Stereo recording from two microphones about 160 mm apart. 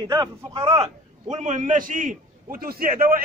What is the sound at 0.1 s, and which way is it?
Speech, 25° right (ahead or behind).